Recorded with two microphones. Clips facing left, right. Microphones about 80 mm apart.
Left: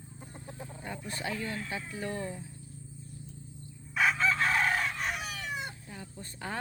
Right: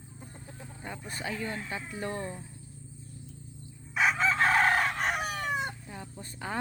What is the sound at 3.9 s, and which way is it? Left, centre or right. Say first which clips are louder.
Chicken: right 1 dB; centre.